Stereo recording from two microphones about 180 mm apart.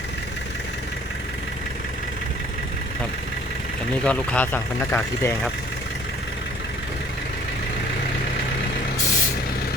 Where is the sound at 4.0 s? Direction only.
5° left (ahead or behind).